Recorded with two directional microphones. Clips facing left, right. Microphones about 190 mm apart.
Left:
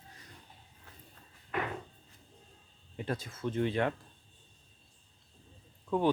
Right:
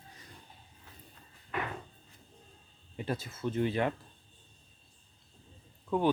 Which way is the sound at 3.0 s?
5° right (ahead or behind).